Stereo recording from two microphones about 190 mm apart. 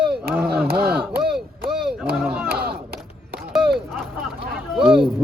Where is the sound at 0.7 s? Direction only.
55° right (ahead or behind).